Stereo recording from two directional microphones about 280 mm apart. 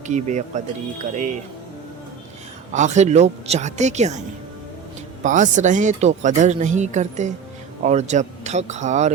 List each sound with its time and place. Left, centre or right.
0.1 s speech: right
2.7 s speech: right
5.2 s speech: right